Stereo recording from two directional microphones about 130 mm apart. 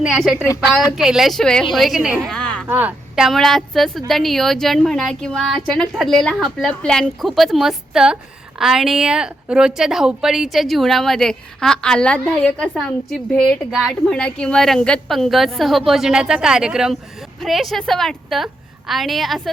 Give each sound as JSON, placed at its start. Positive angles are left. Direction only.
{"t": 0.0, "sound": "a woman's voice", "side_deg": 0}
{"t": 2.2, "sound": "a sound", "side_deg": 5}
{"t": 2.6, "sound": "a woman's voice", "side_deg": -15}
{"t": 3.2, "sound": "a woman's voice", "side_deg": 0}